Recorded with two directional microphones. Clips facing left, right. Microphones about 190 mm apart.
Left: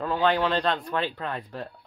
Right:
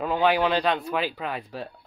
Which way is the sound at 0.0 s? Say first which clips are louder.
Right 2 dB; 15° right (ahead or behind).